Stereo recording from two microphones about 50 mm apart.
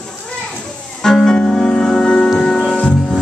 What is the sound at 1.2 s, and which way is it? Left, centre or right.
Music, centre.